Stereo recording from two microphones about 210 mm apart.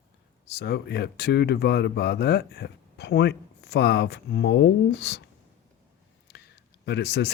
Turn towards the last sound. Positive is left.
turn(degrees=55)  # may be behind; listen again after turning